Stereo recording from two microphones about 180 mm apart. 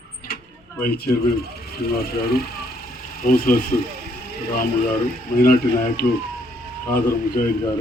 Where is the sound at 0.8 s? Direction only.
55° left (ahead or behind).